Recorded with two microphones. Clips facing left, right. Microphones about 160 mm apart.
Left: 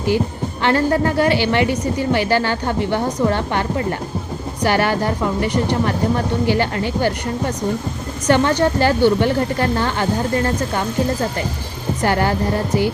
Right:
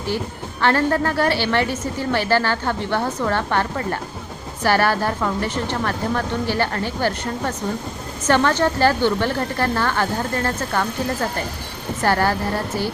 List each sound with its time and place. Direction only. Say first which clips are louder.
0.6 s a woman's voice: left 2 dB; 15° left (ahead or behind)